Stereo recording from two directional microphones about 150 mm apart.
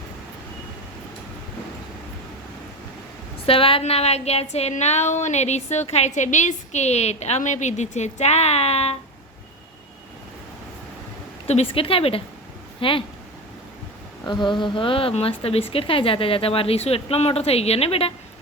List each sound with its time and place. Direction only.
3.4 s speech: 40° left (ahead or behind)
11.4 s a woman's voice: 40° left (ahead or behind)
14.3 s a woman's voice: 30° left (ahead or behind)